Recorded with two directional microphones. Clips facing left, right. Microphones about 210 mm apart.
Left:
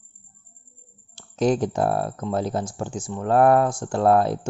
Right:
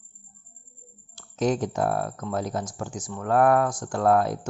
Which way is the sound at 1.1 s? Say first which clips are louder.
Left 3 dB; 30° left (ahead or behind).